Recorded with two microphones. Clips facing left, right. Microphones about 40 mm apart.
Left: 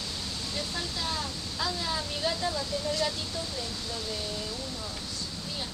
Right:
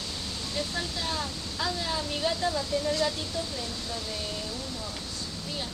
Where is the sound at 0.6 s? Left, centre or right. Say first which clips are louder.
Right 3 dB; centre.